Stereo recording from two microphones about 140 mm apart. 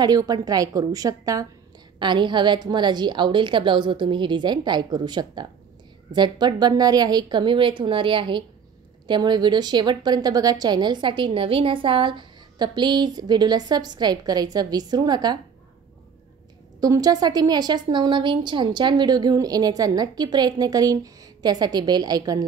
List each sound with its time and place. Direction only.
0.0 s a woman's voice: 25° right (ahead or behind)
16.8 s a woman's voice: 25° right (ahead or behind)